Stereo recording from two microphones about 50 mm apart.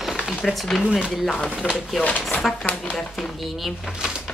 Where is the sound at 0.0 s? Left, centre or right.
Centre.